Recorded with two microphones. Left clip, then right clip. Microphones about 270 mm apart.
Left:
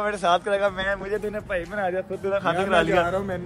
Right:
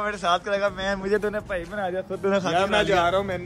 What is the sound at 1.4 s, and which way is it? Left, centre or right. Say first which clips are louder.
A man's voice: left 1 dB; centre.